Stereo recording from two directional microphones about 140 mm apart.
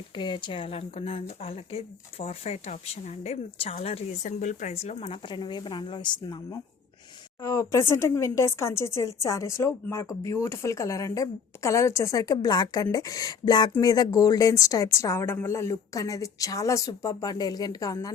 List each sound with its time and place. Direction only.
0.2 s speech: 35° left (ahead or behind)